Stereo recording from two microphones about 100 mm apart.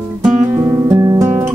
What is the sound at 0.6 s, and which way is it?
Music, 30° right (ahead or behind).